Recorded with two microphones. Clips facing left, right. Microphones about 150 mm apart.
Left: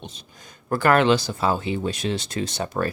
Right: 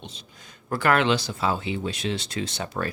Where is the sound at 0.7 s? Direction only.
45° left (ahead or behind).